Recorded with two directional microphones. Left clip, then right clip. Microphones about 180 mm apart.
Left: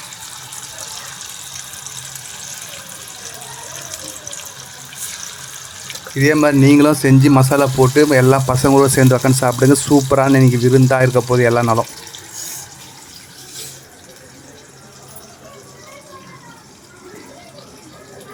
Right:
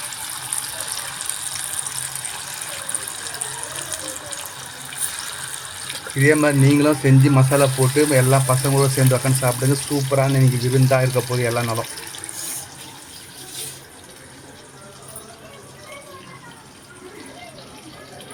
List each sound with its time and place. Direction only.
6.1 s speech: 20° left (ahead or behind)